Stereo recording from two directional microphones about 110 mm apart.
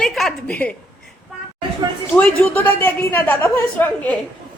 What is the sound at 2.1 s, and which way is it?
A woman's voice, 15° left (ahead or behind).